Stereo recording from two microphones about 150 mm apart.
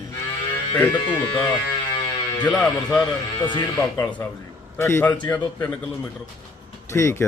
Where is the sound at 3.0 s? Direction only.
30° left (ahead or behind).